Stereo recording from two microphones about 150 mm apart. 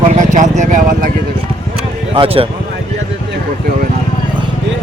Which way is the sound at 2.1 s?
35° right (ahead or behind).